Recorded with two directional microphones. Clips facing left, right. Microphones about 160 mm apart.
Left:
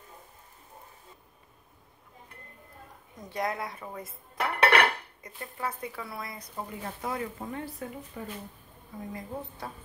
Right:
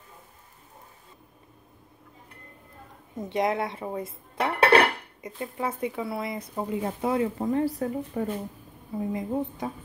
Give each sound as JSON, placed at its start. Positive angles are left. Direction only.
{"t": 3.2, "sound": "speech", "side_deg": -25}
{"t": 4.4, "sound": "dishes", "side_deg": -25}
{"t": 7.4, "sound": "speech", "side_deg": -35}
{"t": 9.1, "sound": "speech", "side_deg": -20}